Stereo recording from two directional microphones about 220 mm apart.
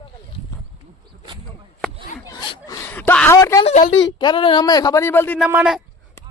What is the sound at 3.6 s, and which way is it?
Speech, 35° left (ahead or behind).